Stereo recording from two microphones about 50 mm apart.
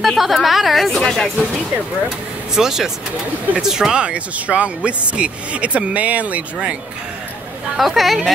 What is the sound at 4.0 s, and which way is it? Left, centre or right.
Speech, right.